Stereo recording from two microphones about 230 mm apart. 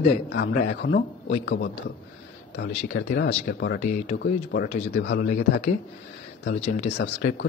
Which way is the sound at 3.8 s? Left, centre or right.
Left.